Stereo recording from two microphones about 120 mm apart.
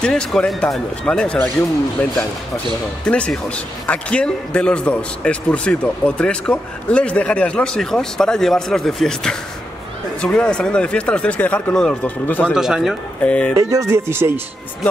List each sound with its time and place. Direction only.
0.0 s speech: 5° left (ahead or behind)
3.1 s a man's voice: 10° left (ahead or behind)
12.5 s speech: 5° right (ahead or behind)
13.2 s a man's voice: 10° left (ahead or behind)
13.6 s speech: 25° right (ahead or behind)